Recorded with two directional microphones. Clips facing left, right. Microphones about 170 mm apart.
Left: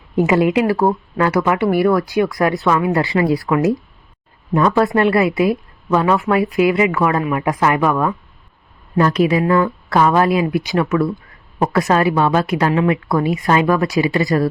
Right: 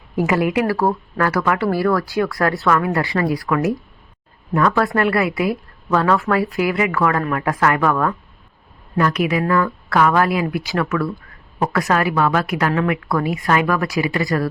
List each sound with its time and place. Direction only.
0.2 s speech: 20° left (ahead or behind)
9.0 s speech: 30° left (ahead or behind)